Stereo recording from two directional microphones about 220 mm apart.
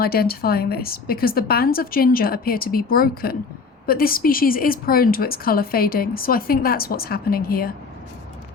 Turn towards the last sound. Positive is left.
turn(degrees=40)  # may be behind; listen again after turning